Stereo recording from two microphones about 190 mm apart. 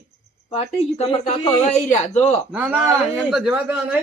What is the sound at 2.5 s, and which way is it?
Speech, 5° right (ahead or behind).